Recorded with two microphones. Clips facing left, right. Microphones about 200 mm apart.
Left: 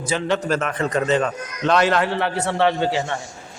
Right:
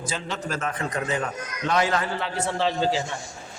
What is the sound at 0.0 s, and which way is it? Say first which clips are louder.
A man's voice: left 9 dB; 70° left (ahead or behind).